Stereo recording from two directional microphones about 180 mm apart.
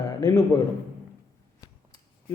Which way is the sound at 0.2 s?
20° left (ahead or behind).